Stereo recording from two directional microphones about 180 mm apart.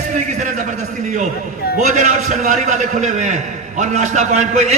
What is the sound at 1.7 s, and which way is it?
A man's voice, 45° right (ahead or behind).